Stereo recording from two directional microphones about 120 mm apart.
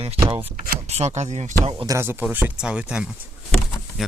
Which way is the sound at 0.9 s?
65° right (ahead or behind).